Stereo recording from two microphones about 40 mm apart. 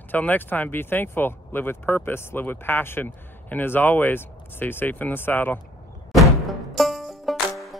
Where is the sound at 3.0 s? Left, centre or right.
Left.